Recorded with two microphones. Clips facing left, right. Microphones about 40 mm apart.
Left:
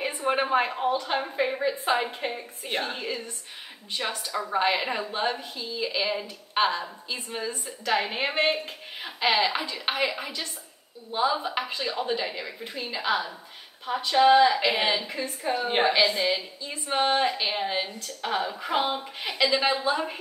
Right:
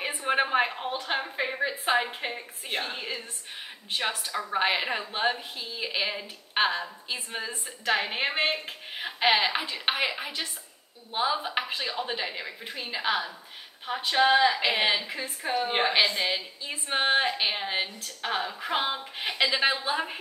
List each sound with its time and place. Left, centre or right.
0.0 s a sound: centre
0.8 s a woman's voice: centre
1.2 s a woman's voice: centre
4.6 s a woman's voice: centre
8.6 s a woman's voice: centre